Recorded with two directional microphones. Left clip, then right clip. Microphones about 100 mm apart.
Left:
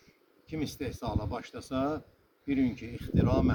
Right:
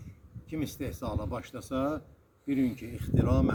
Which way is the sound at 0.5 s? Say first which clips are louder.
Even; 20° left (ahead or behind).